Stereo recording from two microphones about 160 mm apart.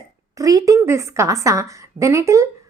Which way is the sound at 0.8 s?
15° right (ahead or behind).